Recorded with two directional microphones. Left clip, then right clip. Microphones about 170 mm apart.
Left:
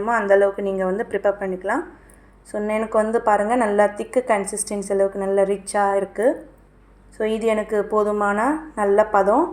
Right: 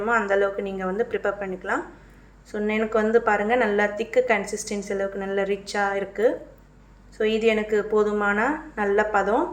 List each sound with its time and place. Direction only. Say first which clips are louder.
0.0 s a woman's voice: left 5 dB; 35° left (ahead or behind)